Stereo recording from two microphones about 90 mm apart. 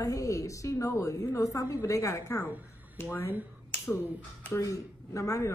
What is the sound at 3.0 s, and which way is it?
Speech, 25° left (ahead or behind).